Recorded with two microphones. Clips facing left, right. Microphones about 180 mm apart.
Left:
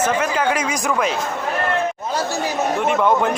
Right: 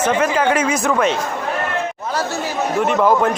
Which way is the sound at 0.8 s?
5° left (ahead or behind).